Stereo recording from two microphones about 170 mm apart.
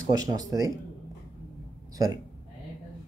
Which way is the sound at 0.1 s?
20° right (ahead or behind).